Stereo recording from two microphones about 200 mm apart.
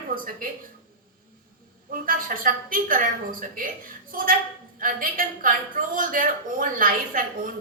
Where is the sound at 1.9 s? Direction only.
45° right (ahead or behind).